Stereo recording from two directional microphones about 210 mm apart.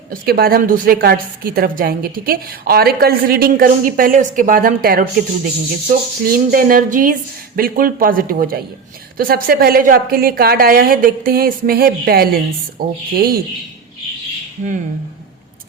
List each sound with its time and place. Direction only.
0.1 s a woman's voice: 45° right (ahead or behind)